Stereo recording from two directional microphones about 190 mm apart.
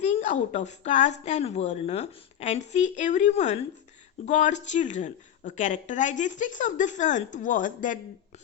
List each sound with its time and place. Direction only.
0.0 s a woman's voice: 35° left (ahead or behind)